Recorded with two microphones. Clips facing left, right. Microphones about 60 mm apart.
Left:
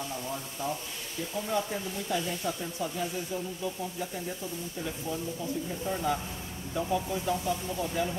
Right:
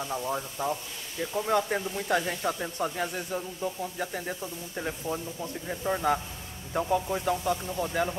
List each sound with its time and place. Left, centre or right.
0.1 s speech: right